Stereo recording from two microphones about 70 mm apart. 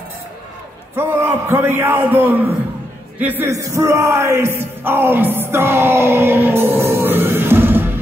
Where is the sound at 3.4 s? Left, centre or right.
Right.